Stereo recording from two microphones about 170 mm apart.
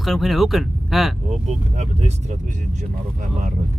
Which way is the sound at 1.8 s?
40° right (ahead or behind).